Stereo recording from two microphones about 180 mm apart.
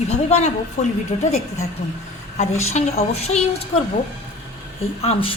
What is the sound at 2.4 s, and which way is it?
A woman's voice, 35° left (ahead or behind).